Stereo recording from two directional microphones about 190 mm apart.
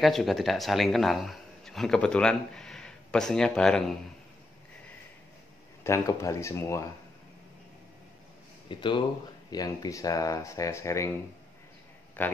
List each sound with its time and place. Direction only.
0.0 s a man's voice: centre (ahead or behind)
5.9 s speech: 15° left (ahead or behind)
8.6 s speech: 25° left (ahead or behind)
12.2 s speech: 10° left (ahead or behind)